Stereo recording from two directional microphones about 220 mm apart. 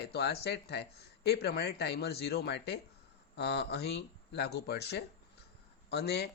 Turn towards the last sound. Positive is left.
turn(degrees=50)  # may be behind; listen again after turning